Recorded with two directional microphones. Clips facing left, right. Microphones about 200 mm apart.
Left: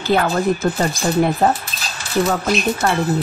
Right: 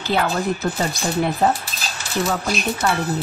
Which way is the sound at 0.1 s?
50° left (ahead or behind).